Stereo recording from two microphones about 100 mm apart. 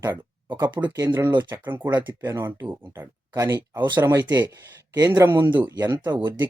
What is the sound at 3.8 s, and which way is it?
Speech, 50° right (ahead or behind).